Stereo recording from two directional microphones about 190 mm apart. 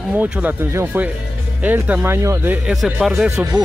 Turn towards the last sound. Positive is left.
turn(degrees=-15)  # may be behind; listen again after turning